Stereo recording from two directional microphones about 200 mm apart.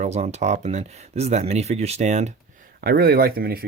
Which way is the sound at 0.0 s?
35° right (ahead or behind).